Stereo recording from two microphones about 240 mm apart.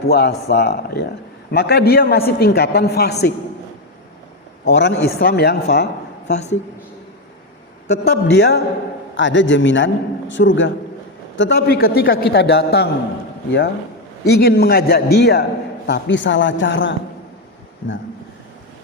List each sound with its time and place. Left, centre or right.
0.1 s a man's voice: left
4.6 s a man's voice: left
5.7 s a sound: left
6.3 s a woman's voice: left
7.9 s a man's voice: left
14.3 s a man's voice: left